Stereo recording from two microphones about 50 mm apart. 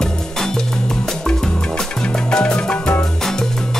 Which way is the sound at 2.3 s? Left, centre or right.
Centre.